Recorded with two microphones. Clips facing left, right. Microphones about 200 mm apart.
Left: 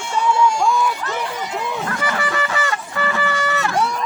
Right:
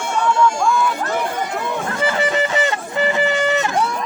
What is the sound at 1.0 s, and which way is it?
Run, 50° right (ahead or behind).